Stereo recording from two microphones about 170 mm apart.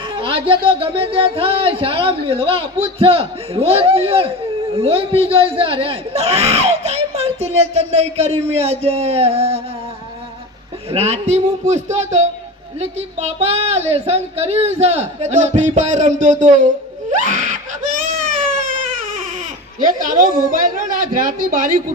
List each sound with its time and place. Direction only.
0.1 s speech: 30° right (ahead or behind)
10.9 s speech: 40° right (ahead or behind)
17.1 s wail: 45° right (ahead or behind)
18.9 s baby cry: 50° right (ahead or behind)
19.9 s a woman's voice: 50° right (ahead or behind)